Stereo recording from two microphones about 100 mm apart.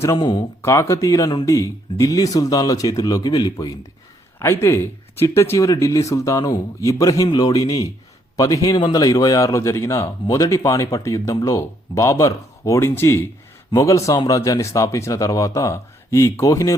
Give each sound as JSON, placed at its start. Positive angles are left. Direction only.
{"t": 0.2, "sound": "speech", "side_deg": 50}
{"t": 0.6, "sound": "speech", "side_deg": 30}
{"t": 4.4, "sound": "speech", "side_deg": 25}